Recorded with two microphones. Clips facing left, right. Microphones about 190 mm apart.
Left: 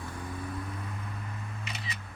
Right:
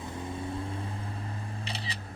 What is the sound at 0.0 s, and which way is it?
Vehicle, 25° right (ahead or behind).